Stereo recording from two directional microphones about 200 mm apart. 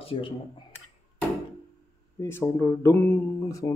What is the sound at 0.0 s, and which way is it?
Speech, 30° left (ahead or behind).